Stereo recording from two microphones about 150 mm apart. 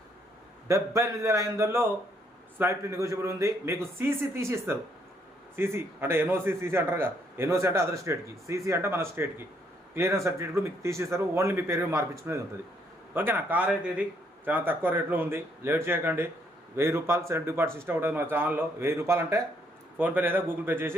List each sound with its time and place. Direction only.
0.7 s a man's voice: 20° right (ahead or behind)